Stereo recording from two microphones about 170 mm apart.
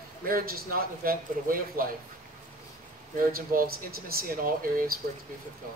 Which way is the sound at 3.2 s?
60° right (ahead or behind).